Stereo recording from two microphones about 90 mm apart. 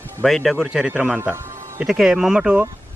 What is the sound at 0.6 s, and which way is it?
Speech, 15° right (ahead or behind).